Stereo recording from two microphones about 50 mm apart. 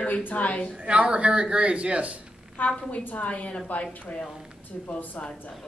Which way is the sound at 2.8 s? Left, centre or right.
Left.